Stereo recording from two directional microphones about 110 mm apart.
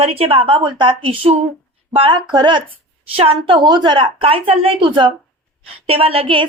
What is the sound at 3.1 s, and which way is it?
A woman's voice, 60° right (ahead or behind).